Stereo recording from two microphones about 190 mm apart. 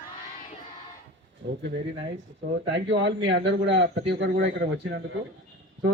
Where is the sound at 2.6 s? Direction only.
70° right (ahead or behind).